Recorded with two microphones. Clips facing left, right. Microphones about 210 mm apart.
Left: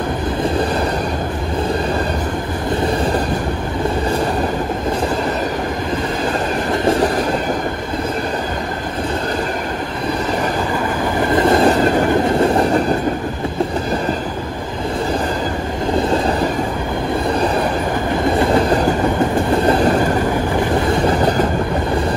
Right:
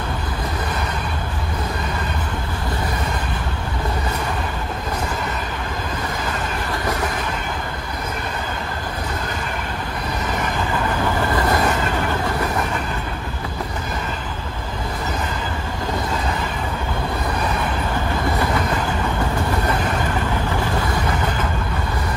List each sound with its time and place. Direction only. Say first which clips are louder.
6.7 s train: left 10 dB; 25° left (ahead or behind)
11.3 s vehicle: left 11 dB; 25° left (ahead or behind)
12.3 s train: left 9 dB; 25° left (ahead or behind)
18.2 s train: left 9 dB; 25° left (ahead or behind)
20.9 s train: left 8 dB; 35° left (ahead or behind)